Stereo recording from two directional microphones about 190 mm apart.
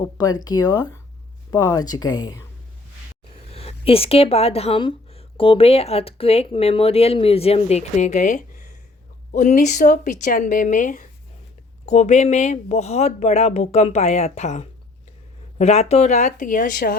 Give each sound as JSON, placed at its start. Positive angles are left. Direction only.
{"t": 0.0, "sound": "speech", "side_deg": 20}
{"t": 3.5, "sound": "speech", "side_deg": 30}